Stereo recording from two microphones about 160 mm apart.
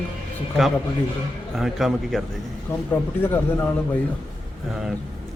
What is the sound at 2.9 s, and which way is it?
Speech, 15° left (ahead or behind).